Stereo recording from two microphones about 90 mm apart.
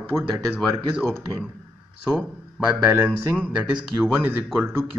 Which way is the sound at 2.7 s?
25° right (ahead or behind).